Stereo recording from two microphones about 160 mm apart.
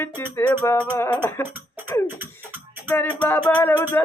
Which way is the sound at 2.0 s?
10° right (ahead or behind).